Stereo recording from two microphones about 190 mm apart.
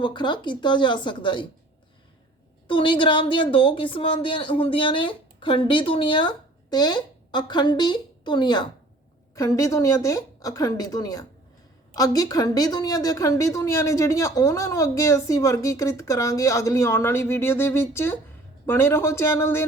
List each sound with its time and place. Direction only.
0.0 s a woman's voice: 25° left (ahead or behind)
2.6 s a woman's voice: 25° left (ahead or behind)